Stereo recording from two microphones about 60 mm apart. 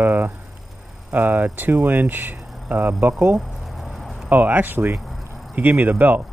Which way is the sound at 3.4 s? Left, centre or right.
Centre.